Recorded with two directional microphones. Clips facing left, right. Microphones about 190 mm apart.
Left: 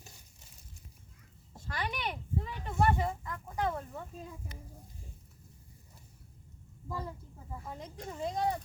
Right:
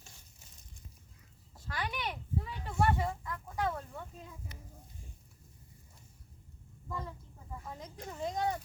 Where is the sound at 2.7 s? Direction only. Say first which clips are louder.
Left 2 dB; 20° left (ahead or behind).